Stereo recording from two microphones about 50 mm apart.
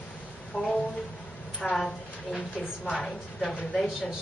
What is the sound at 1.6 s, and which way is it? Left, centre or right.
A woman's voice, centre.